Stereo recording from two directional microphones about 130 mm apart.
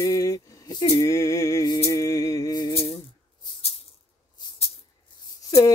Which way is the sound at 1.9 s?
25° left (ahead or behind).